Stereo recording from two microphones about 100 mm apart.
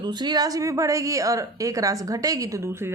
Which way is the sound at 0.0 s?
45° right (ahead or behind).